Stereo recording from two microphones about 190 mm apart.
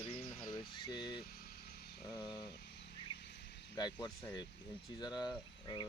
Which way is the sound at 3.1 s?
25° left (ahead or behind).